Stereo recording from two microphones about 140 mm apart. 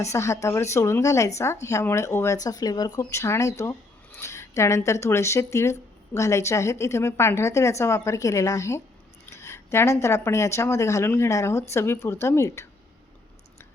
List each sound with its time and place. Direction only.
0.0 s speech: 20° left (ahead or behind)